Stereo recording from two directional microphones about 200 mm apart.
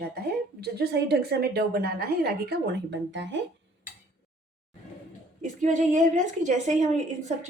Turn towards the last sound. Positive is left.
turn(degrees=-35)  # may be behind; listen again after turning